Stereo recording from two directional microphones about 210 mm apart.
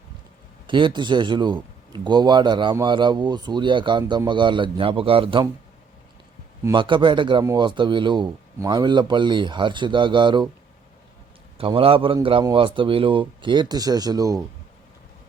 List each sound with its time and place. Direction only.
0.7 s a man's voice: 25° right (ahead or behind)
6.7 s a man's voice: 25° right (ahead or behind)
11.5 s a man's voice: 25° right (ahead or behind)